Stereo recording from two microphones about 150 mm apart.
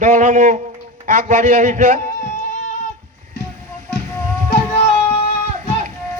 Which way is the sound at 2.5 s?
55° left (ahead or behind).